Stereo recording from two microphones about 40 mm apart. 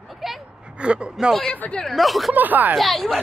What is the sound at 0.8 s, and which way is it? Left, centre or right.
Speech, right.